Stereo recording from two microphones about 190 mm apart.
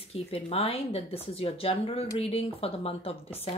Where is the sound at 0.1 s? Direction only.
30° left (ahead or behind).